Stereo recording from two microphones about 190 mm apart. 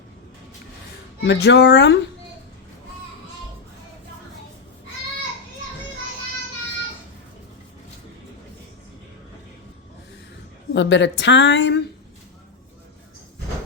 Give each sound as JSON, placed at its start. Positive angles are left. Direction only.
{"t": 1.2, "sound": "speech", "side_deg": 65}
{"t": 10.8, "sound": "speech", "side_deg": 70}